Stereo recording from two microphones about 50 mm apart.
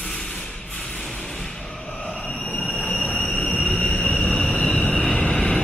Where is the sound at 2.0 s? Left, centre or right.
Left.